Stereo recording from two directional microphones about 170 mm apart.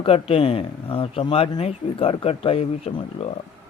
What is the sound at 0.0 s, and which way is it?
Speech, 35° left (ahead or behind).